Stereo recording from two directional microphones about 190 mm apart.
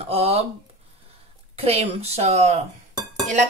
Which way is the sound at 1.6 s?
30° right (ahead or behind).